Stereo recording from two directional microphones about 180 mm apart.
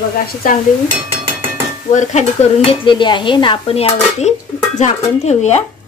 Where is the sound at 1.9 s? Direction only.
40° left (ahead or behind).